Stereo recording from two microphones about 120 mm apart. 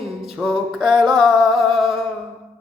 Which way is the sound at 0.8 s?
40° right (ahead or behind).